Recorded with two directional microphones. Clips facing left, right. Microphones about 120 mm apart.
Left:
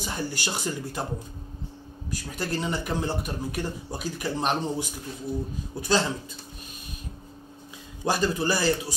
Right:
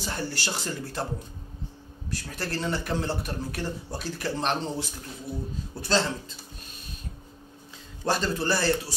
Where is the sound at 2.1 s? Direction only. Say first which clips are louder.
Left 2 dB; 15° left (ahead or behind).